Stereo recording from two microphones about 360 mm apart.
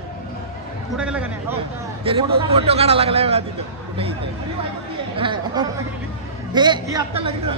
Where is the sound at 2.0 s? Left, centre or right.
Centre.